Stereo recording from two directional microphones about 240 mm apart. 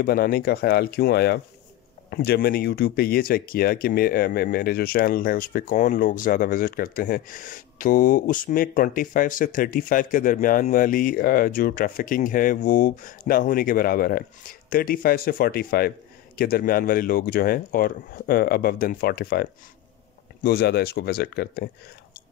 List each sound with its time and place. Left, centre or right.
0.0 s speech: left